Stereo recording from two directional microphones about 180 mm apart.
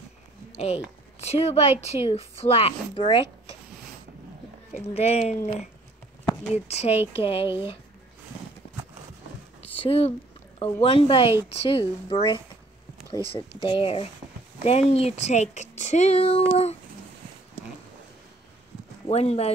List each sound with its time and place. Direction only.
1.2 s speech: 35° left (ahead or behind)
4.7 s speech: 35° left (ahead or behind)
6.5 s speech: 35° left (ahead or behind)
9.8 s speech: 35° left (ahead or behind)
19.0 s speech: 35° left (ahead or behind)